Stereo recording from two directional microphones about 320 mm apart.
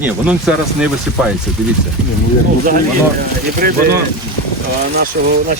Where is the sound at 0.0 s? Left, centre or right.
Centre.